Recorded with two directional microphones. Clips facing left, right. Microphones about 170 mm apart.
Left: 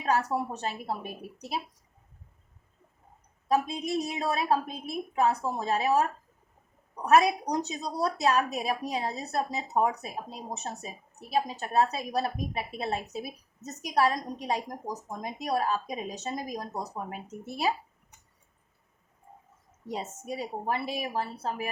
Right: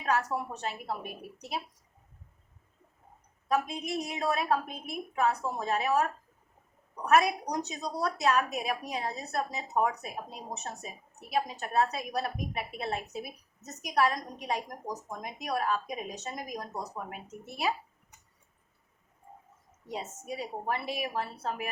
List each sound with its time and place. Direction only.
0.0 s a woman's voice: 35° left (ahead or behind)
3.5 s a woman's voice: 30° left (ahead or behind)
19.9 s a woman's voice: 40° left (ahead or behind)